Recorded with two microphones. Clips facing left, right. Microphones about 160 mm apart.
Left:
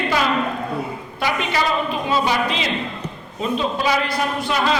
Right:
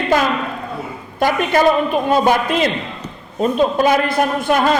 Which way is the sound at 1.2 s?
50° right (ahead or behind).